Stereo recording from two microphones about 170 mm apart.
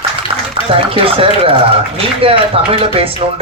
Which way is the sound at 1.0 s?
35° right (ahead or behind).